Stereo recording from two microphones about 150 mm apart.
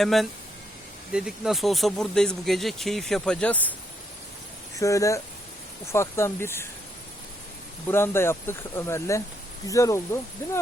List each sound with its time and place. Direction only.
0.0 s speech: centre (ahead or behind)
4.8 s speech: 20° left (ahead or behind)
7.9 s speech: 15° left (ahead or behind)